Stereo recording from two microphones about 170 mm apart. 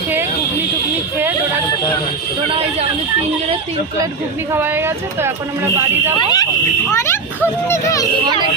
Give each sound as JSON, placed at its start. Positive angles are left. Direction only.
{"t": 4.5, "sound": "speech", "side_deg": -15}
{"t": 6.1, "sound": "a child's voice", "side_deg": 25}